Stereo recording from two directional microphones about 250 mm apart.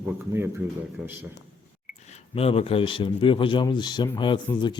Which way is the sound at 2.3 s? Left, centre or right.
Left.